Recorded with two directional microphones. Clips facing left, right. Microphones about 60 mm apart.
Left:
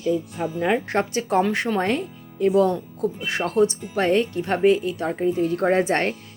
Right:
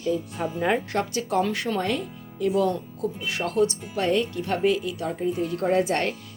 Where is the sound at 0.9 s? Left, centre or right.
Left.